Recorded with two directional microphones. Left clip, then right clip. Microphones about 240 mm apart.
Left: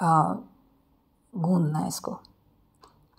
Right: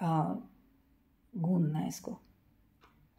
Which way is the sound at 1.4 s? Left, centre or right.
Centre.